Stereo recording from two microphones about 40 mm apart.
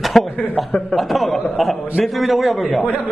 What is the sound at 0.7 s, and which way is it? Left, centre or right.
Speech, left.